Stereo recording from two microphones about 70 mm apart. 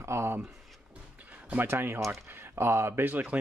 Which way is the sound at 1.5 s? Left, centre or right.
Right.